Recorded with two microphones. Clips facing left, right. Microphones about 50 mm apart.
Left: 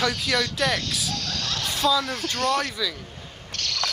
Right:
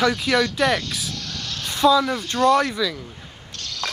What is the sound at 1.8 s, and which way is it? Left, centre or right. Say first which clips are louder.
Speech: right 7 dB; centre.